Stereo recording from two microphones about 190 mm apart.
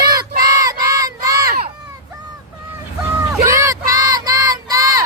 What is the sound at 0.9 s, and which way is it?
Child singing, 20° right (ahead or behind).